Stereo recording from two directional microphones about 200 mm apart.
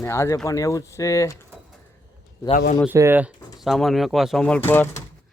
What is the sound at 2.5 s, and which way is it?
Speech, 40° left (ahead or behind).